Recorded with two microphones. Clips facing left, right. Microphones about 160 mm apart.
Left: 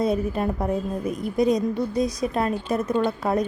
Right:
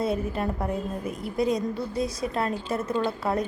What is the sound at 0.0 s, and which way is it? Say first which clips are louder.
A woman's voice: left 4 dB; 20° left (ahead or behind).